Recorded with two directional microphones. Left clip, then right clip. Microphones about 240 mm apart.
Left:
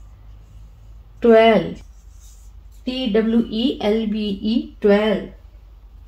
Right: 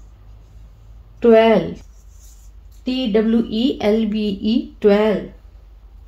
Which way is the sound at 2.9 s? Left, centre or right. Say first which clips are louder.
Right 1 dB; right.